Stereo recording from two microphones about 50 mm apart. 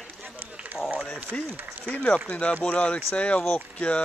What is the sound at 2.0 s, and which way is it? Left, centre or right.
Speech, left.